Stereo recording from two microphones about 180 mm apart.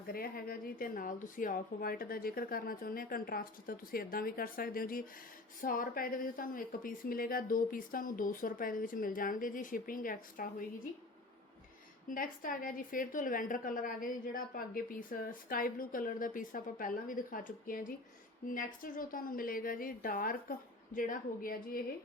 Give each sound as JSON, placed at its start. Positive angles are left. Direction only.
{"t": 0.1, "sound": "a woman's voice", "side_deg": 55}
{"t": 12.0, "sound": "a woman's voice", "side_deg": 50}